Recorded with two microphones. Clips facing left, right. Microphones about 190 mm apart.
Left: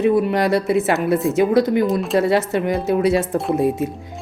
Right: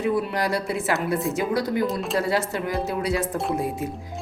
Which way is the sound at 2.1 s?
20° left (ahead or behind).